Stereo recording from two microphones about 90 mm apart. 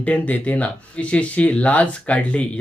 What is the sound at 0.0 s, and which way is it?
Speech, 15° left (ahead or behind).